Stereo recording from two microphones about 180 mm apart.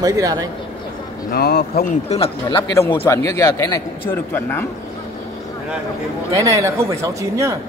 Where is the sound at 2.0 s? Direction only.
35° left (ahead or behind).